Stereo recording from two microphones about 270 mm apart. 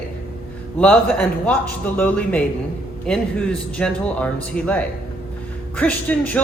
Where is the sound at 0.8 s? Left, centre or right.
Centre.